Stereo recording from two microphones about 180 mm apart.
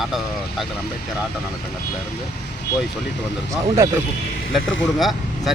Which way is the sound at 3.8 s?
15° right (ahead or behind).